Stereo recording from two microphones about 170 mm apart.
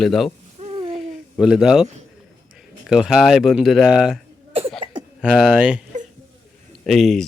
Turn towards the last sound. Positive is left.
turn(degrees=0)  # may be behind; listen again after turning